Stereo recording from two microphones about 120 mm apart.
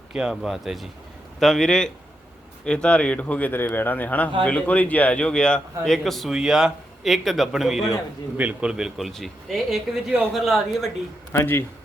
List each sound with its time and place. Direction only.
0.1 s a man's voice: 5° right (ahead or behind)
11.3 s speech: 20° left (ahead or behind)